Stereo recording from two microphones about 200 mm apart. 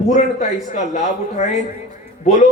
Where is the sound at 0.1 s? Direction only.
35° left (ahead or behind).